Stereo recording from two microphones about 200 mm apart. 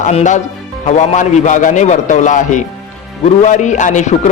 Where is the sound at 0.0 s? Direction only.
35° left (ahead or behind).